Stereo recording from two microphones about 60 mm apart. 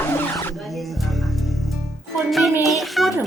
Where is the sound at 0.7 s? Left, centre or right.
Centre.